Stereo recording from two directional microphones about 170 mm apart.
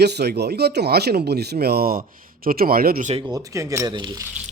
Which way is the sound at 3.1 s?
25° right (ahead or behind).